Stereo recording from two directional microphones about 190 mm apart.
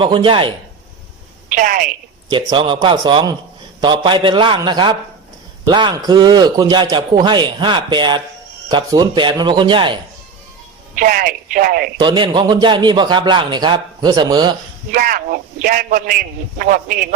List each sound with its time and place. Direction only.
0.0 s a man's voice: 25° right (ahead or behind)
1.5 s a woman's voice: 45° right (ahead or behind)
2.3 s a man's voice: 25° right (ahead or behind)
10.9 s a man's voice: 45° right (ahead or behind)
11.9 s a man's voice: 25° right (ahead or behind)
14.9 s a man's voice: 50° right (ahead or behind)